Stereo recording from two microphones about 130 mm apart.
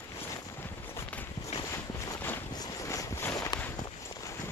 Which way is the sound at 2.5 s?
25° left (ahead or behind).